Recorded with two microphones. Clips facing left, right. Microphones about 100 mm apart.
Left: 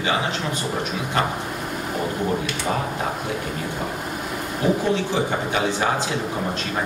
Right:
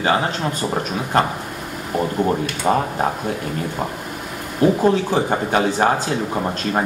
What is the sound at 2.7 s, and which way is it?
Speech, 35° right (ahead or behind).